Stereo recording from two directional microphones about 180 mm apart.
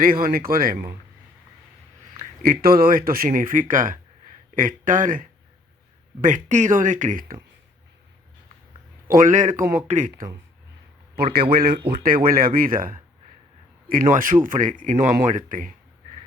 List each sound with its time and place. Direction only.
0.0 s speech: 50° right (ahead or behind)
2.4 s speech: 55° right (ahead or behind)
9.0 s speech: 50° right (ahead or behind)
11.1 s a man's voice: 60° right (ahead or behind)